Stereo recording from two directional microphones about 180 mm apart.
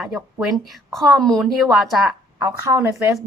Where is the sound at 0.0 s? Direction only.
5° right (ahead or behind).